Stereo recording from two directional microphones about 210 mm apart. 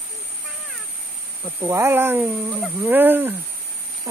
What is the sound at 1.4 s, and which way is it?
Speech, 10° right (ahead or behind).